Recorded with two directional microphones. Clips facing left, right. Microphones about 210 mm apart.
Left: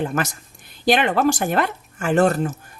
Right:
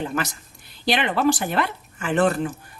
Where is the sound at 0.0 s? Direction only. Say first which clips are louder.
Left 3 dB; 50° left (ahead or behind).